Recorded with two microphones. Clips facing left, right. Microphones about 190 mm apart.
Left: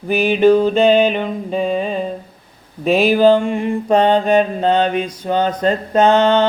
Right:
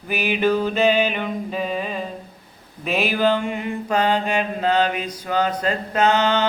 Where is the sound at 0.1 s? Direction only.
30° left (ahead or behind).